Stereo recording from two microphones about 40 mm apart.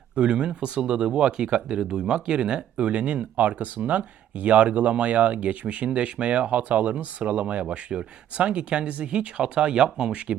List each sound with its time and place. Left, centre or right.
0.2 s speech: right
3.3 s speech: right